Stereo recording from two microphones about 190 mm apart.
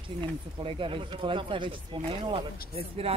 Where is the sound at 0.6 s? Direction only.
30° right (ahead or behind).